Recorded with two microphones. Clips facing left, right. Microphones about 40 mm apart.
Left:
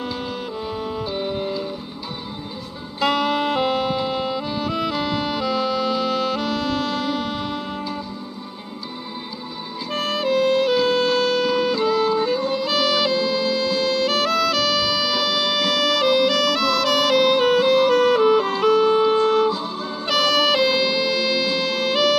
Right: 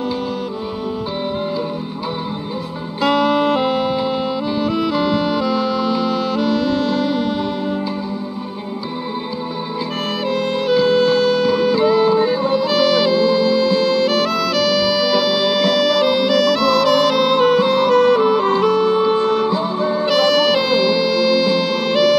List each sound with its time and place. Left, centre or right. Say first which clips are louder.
1.1 s music: right 3 dB; centre
3.0 s music: right 5 dB; centre
10.2 s music: left 2 dB; centre
12.5 s music: right 5 dB; centre
19.5 s music: right 9 dB; right
20.1 s music: right 2 dB; centre